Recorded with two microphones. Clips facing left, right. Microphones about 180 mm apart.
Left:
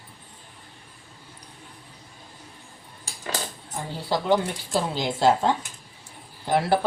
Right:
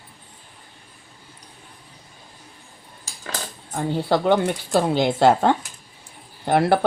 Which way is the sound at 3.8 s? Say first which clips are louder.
Right 7 dB; 60° right (ahead or behind).